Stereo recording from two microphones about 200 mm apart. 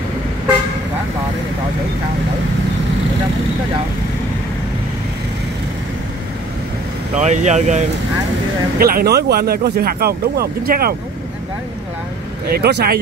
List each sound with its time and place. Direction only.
7.2 s speech: 35° right (ahead or behind)
8.7 s speech: 45° right (ahead or behind)
12.4 s speech: 55° right (ahead or behind)